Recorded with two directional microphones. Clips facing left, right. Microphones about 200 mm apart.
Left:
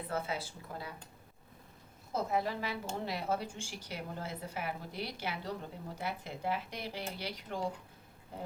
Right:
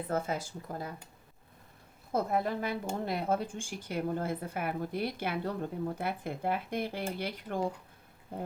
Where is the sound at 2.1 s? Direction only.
55° right (ahead or behind).